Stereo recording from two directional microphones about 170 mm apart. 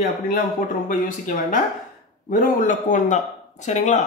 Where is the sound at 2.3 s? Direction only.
50° left (ahead or behind).